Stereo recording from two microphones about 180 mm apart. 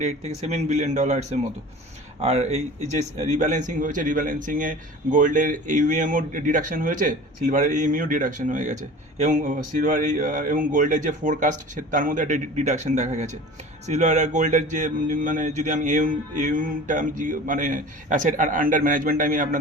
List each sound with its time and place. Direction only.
0.0 s speech: 40° right (ahead or behind)